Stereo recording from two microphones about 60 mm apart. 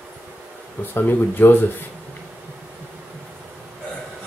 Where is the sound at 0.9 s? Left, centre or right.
Left.